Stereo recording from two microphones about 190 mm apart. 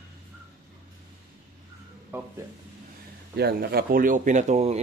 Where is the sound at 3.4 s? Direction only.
55° right (ahead or behind); by 4.8 s 35° right (ahead or behind).